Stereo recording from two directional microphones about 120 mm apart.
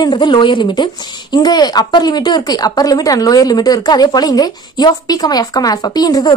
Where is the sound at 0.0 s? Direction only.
40° left (ahead or behind).